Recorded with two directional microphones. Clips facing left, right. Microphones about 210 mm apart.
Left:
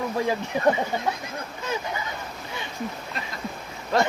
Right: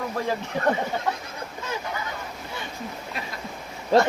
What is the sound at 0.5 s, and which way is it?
Speech, 15° left (ahead or behind).